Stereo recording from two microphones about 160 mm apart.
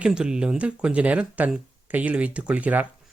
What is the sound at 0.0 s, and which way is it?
Speech, 5° right (ahead or behind).